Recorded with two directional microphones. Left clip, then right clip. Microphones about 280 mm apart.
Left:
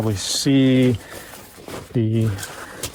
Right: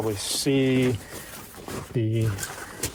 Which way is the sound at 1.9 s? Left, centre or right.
Left.